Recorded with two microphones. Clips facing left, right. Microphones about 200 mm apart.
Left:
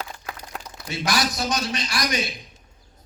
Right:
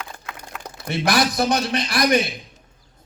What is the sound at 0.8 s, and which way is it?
A man's voice, 55° right (ahead or behind).